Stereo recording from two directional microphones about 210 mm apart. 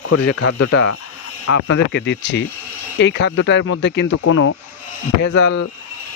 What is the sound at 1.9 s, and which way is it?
Speech, 55° left (ahead or behind).